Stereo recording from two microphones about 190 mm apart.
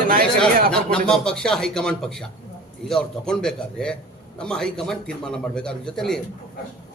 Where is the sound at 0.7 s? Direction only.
5° left (ahead or behind).